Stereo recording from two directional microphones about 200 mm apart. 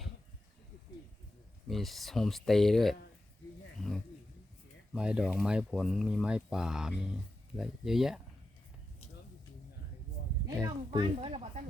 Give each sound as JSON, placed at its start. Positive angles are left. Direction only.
{"t": 1.6, "sound": "speech", "side_deg": 0}
{"t": 3.8, "sound": "bird", "side_deg": 0}
{"t": 4.9, "sound": "speech", "side_deg": -5}
{"t": 10.4, "sound": "a woman's voice", "side_deg": -20}